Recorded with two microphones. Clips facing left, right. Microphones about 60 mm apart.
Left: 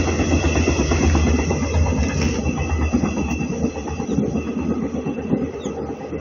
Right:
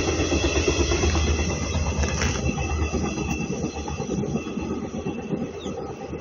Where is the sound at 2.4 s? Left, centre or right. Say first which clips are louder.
Left 4 dB; left.